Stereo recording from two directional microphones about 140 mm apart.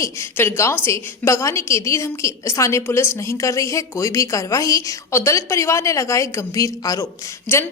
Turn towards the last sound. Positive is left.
turn(degrees=15)  # may be behind; listen again after turning